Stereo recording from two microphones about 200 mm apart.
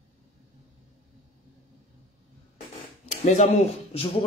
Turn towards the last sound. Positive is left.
turn(degrees=30)  # may be behind; listen again after turning